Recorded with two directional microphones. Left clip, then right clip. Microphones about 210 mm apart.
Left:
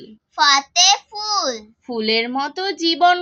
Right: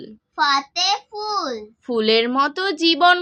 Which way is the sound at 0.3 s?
45° left (ahead or behind).